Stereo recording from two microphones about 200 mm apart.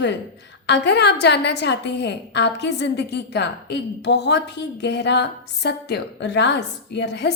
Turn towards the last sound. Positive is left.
turn(degrees=60)  # may be behind; listen again after turning